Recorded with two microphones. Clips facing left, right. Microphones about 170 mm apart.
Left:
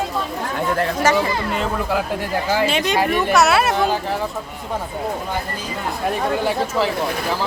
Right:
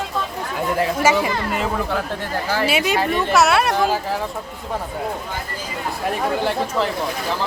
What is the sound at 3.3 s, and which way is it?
Speech, centre (ahead or behind).